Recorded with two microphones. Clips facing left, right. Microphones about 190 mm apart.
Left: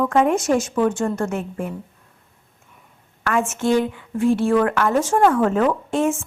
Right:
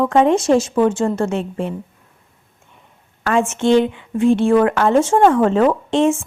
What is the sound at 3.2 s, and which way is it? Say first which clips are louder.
A woman's voice: right 4 dB; 25° right (ahead or behind).